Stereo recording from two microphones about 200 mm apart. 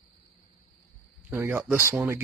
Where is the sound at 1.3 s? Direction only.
10° right (ahead or behind).